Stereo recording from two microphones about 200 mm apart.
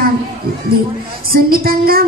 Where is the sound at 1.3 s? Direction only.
50° right (ahead or behind).